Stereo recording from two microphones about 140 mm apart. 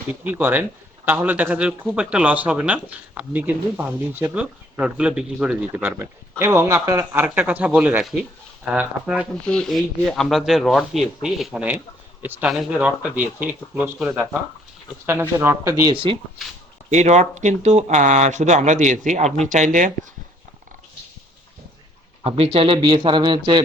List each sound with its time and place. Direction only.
0.1 s speech: 15° right (ahead or behind)
5.8 s a man's voice: 20° right (ahead or behind)
9.5 s speech: 5° left (ahead or behind); by 15.7 s 15° right (ahead or behind)
15.8 s speech: 35° right (ahead or behind)
16.9 s speech: 55° right (ahead or behind)
22.2 s speech: 45° right (ahead or behind)